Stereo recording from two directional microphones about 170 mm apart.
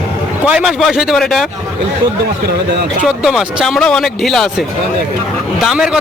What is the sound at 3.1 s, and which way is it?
Speech, centre (ahead or behind).